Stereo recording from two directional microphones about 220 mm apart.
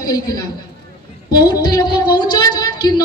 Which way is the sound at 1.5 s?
15° left (ahead or behind).